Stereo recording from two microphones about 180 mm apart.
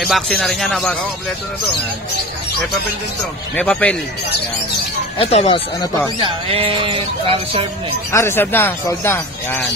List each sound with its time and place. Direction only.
0.0 s speech: centre (ahead or behind)
3.5 s speech: 10° left (ahead or behind)
5.2 s speech: 35° left (ahead or behind)
6.1 s speech: 30° right (ahead or behind)
8.1 s speech: 15° left (ahead or behind)